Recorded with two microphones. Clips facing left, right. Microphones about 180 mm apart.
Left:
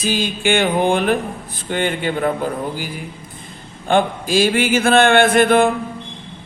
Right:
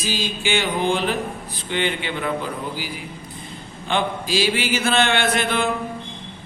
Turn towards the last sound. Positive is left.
turn(degrees=50)  # may be behind; listen again after turning